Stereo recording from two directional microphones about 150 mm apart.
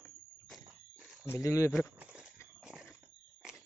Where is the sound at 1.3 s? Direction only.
15° left (ahead or behind).